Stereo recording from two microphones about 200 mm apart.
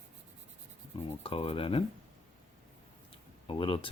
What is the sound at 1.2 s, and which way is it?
Speech, 30° left (ahead or behind).